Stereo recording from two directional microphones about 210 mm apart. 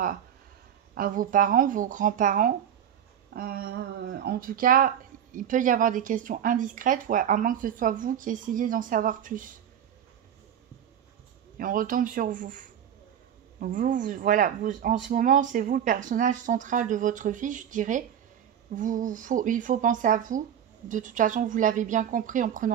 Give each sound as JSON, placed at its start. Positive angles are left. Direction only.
{"t": 0.9, "sound": "speech", "side_deg": -40}
{"t": 11.5, "sound": "speech", "side_deg": -40}